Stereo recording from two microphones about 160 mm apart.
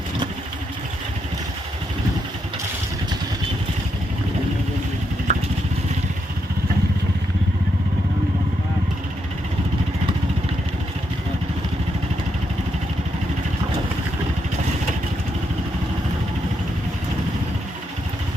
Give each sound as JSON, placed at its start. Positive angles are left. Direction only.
{"t": 5.3, "sound": "vehicle", "side_deg": -45}